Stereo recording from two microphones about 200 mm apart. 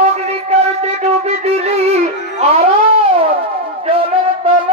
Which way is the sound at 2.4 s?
30° right (ahead or behind).